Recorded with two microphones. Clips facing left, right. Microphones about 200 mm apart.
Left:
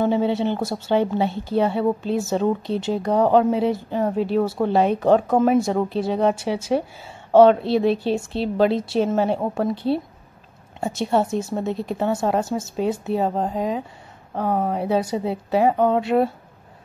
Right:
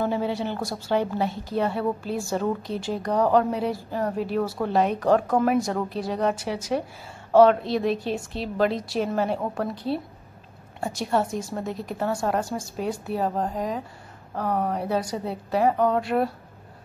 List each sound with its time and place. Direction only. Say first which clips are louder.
0.0 s a woman's voice: left 6 dB; 25° left (ahead or behind)
10.8 s a woman's voice: left 4 dB; 25° left (ahead or behind)